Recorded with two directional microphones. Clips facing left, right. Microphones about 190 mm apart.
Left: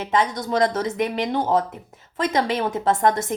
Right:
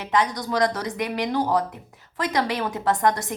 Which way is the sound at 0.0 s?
25° left (ahead or behind).